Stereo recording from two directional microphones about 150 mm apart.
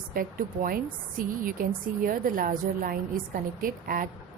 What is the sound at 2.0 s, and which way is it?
A woman's voice, 70° right (ahead or behind).